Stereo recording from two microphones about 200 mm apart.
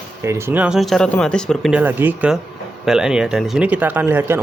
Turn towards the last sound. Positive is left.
turn(degrees=-10)  # may be behind; listen again after turning